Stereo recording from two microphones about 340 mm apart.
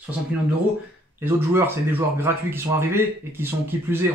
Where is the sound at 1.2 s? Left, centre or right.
Centre.